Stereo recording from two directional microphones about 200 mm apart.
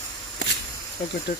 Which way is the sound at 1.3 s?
45° left (ahead or behind).